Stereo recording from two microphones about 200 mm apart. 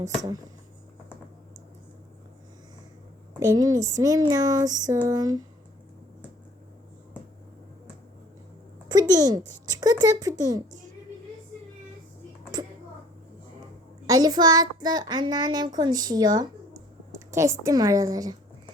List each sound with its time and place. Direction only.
3.4 s a child's voice: 15° right (ahead or behind)
8.9 s a woman's voice: 20° right (ahead or behind)
12.5 s a sound: 20° right (ahead or behind)
14.1 s a child's voice: 20° right (ahead or behind)